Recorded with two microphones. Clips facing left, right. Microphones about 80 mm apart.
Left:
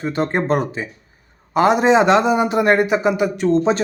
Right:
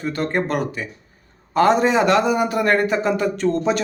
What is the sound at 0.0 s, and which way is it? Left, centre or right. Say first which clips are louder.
A man's voice: left 2 dB; left.